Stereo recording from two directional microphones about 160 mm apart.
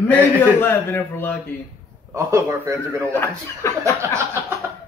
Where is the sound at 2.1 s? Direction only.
15° right (ahead or behind).